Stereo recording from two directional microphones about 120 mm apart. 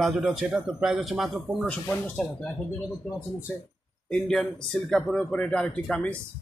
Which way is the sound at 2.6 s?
20° left (ahead or behind).